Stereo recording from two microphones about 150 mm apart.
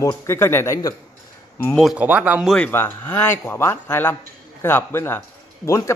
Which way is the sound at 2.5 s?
10° left (ahead or behind).